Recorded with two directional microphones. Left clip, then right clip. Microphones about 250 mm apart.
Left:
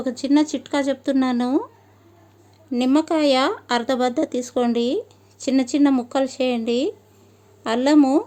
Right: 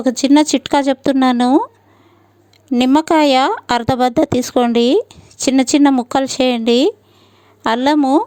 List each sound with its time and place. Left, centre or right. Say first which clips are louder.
0.0 s speech: right 7 dB; right
2.6 s speech: right 7 dB; right